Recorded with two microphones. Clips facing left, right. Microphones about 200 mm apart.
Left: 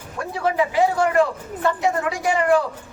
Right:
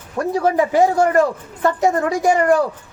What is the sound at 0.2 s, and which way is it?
A woman's voice, 40° right (ahead or behind).